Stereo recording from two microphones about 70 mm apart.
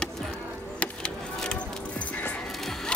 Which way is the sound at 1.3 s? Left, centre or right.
Centre.